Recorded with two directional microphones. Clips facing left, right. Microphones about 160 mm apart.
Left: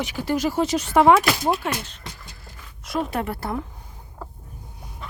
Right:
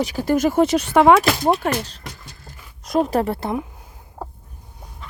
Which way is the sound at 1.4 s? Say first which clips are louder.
Right 5 dB; 45° right (ahead or behind).